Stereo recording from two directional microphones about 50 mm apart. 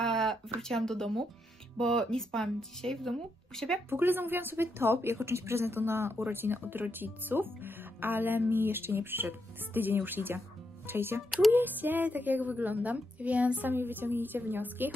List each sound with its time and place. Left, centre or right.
0.0 s a sound: centre
0.6 s speech: centre
3.9 s speech: right
11.2 s speech: centre
11.5 s a woman's voice: right